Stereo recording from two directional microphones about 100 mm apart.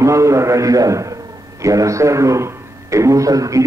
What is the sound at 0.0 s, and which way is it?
A man's voice, 30° right (ahead or behind).